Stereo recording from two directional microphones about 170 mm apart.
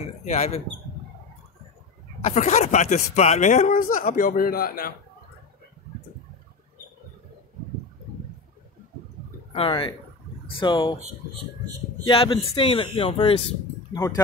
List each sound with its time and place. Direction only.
0.0 s speech: 40° left (ahead or behind)
2.2 s speech: 45° left (ahead or behind); by 4.9 s 60° left (ahead or behind)
9.5 s a man's voice: 30° left (ahead or behind)
12.0 s speech: 30° left (ahead or behind)
13.9 s speech: 20° left (ahead or behind)